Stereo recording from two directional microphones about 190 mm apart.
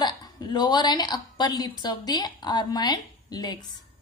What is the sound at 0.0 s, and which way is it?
A woman's voice, 20° left (ahead or behind).